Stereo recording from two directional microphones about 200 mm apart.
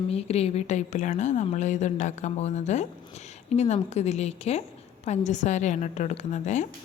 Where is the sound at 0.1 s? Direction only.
30° left (ahead or behind).